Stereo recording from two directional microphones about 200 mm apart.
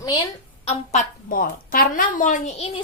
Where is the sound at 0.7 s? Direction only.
40° left (ahead or behind).